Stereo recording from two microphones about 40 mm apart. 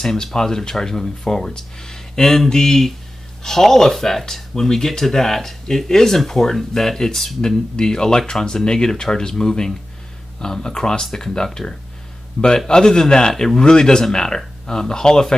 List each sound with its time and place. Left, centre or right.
0.0 s speech: centre